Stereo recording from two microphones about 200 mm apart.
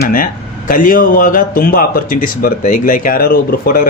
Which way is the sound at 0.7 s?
45° left (ahead or behind).